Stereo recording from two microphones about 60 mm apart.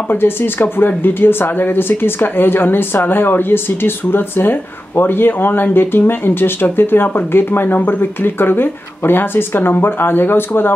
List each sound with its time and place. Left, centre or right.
0.1 s speech: left